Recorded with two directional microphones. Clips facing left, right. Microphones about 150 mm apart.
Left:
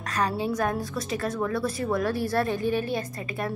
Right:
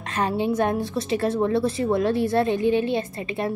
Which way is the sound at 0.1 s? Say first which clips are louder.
Right 4 dB; 25° right (ahead or behind).